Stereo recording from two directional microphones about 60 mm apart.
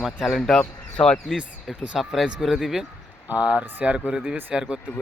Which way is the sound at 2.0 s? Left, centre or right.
Centre.